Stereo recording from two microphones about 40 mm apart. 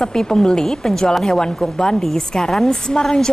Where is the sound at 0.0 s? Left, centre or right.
Centre.